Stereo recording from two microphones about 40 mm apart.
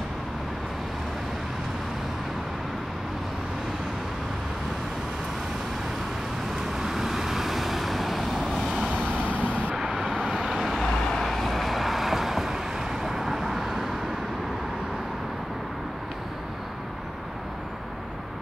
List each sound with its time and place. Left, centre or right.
6.7 s vehicle: centre
9.4 s vehicle: right
9.8 s vehicle: centre
10.8 s vehicle: centre